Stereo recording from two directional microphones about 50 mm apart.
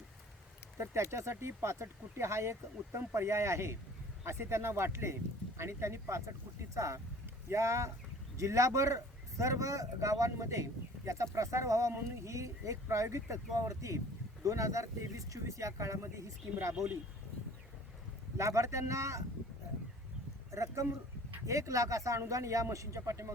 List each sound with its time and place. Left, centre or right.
0.8 s speech: right
6.7 s speech: right
7.5 s speech: right
8.4 s speech: right
18.3 s speech: right
20.5 s speech: right